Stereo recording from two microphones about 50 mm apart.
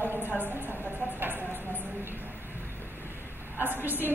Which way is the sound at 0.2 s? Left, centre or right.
Right.